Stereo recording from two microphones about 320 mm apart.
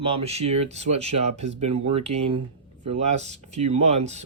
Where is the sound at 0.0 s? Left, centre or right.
Centre.